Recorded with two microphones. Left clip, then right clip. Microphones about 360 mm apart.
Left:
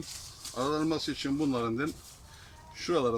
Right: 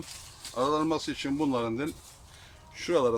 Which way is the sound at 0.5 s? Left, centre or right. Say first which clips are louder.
Right 3 dB; centre.